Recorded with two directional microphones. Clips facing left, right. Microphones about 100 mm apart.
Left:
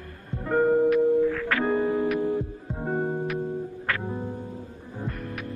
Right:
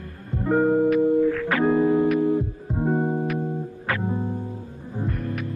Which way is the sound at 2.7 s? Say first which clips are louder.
Right 5 dB; 5° right (ahead or behind).